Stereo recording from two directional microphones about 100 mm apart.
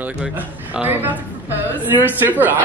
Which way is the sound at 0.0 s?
15° right (ahead or behind).